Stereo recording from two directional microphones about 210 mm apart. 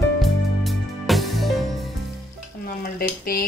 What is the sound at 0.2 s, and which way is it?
Music, centre (ahead or behind).